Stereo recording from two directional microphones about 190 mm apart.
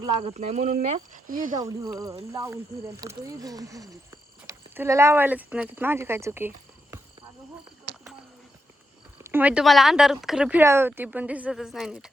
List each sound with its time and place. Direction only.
0.0 s speech: 30° right (ahead or behind); by 1.5 s 45° right (ahead or behind)
1.5 s speech: 15° right (ahead or behind)
9.3 s speech: 10° right (ahead or behind)